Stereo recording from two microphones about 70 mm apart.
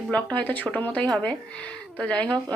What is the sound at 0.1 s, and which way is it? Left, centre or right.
Speech, centre.